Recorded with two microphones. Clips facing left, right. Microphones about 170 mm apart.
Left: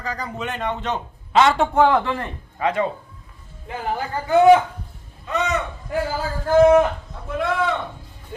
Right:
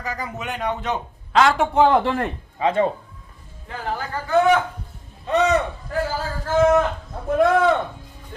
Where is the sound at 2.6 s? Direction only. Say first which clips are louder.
Right 2 dB; 25° right (ahead or behind).